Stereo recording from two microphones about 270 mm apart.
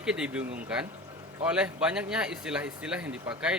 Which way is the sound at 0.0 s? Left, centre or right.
Centre.